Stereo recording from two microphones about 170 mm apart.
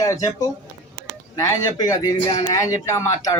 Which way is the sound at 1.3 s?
20° left (ahead or behind).